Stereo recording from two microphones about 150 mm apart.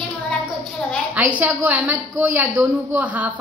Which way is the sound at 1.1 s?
10° right (ahead or behind).